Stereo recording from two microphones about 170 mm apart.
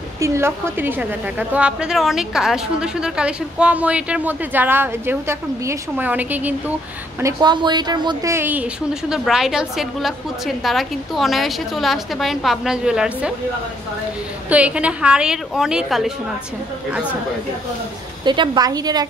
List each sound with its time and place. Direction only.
0.2 s a woman's voice: 15° right (ahead or behind)
7.2 s a woman's voice: 20° right (ahead or behind); by 13.3 s 5° right (ahead or behind)
14.5 s a woman's voice: 5° right (ahead or behind)
18.2 s a woman's voice: 25° right (ahead or behind)